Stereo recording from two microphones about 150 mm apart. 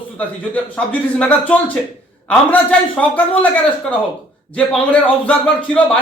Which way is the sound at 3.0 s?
10° left (ahead or behind).